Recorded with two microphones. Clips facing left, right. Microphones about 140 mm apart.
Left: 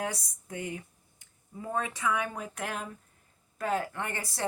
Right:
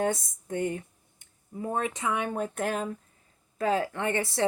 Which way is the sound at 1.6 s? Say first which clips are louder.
Right 2 dB; 25° right (ahead or behind).